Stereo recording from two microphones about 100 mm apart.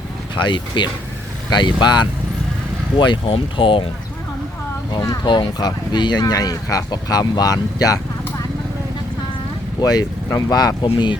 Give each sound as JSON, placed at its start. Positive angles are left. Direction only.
{"t": 0.3, "sound": "speech", "side_deg": 50}
{"t": 4.9, "sound": "speech", "side_deg": 45}
{"t": 9.8, "sound": "speech", "side_deg": 40}
{"t": 10.9, "sound": "speech", "side_deg": 50}